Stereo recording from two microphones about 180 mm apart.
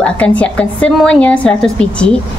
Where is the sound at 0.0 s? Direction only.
5° left (ahead or behind).